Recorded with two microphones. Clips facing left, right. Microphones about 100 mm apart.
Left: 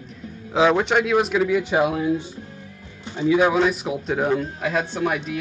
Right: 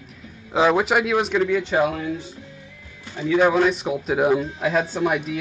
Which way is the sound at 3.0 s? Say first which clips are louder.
Left 5 dB; 20° left (ahead or behind).